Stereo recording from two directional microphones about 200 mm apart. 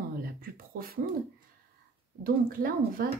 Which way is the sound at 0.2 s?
45° right (ahead or behind).